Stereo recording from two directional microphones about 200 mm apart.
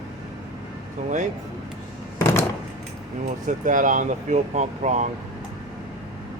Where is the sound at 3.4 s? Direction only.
40° right (ahead or behind).